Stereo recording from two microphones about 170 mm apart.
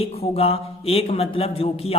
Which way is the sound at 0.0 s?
35° left (ahead or behind).